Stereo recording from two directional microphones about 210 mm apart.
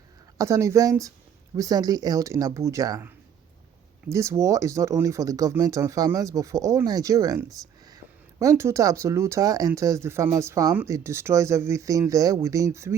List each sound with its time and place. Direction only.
0.3 s speech: 15° right (ahead or behind)
4.1 s speech: 15° right (ahead or behind)